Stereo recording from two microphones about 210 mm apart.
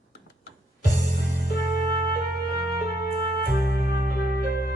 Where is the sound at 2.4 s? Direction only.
50° left (ahead or behind).